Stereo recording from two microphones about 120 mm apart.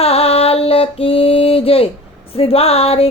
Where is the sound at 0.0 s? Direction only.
55° left (ahead or behind).